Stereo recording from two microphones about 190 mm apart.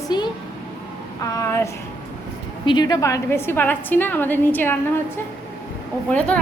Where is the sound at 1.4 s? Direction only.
15° left (ahead or behind).